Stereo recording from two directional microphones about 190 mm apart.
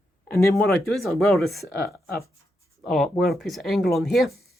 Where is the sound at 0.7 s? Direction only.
Centre (ahead or behind).